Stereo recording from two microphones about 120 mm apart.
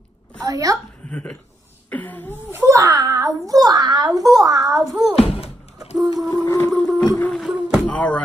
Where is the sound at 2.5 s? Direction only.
25° right (ahead or behind).